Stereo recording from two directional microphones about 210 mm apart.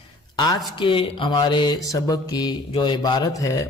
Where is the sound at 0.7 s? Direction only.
25° left (ahead or behind).